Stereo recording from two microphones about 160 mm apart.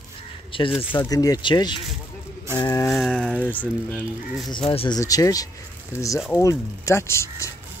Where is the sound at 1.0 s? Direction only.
20° left (ahead or behind).